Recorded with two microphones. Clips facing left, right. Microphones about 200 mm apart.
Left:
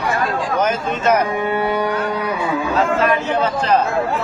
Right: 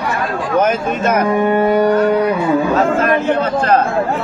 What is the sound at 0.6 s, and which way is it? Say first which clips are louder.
Speech: right 8 dB; 55° right (ahead or behind).